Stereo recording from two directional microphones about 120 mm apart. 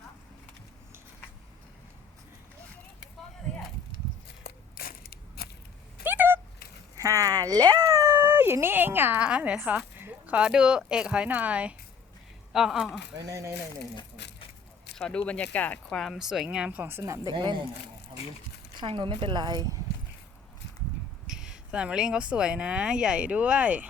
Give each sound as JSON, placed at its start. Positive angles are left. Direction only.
{"t": 6.0, "sound": "a sound", "side_deg": -15}
{"t": 6.9, "sound": "speech", "side_deg": -30}
{"t": 13.1, "sound": "speech", "side_deg": -25}
{"t": 14.9, "sound": "speech", "side_deg": 5}
{"t": 17.3, "sound": "speech", "side_deg": -40}
{"t": 18.9, "sound": "speech", "side_deg": -45}
{"t": 21.2, "sound": "speech", "side_deg": -5}